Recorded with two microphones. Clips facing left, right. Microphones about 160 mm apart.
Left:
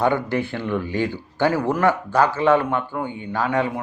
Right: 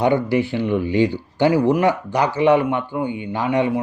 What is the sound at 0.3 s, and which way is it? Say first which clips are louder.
Speech: right 4 dB; 50° left (ahead or behind).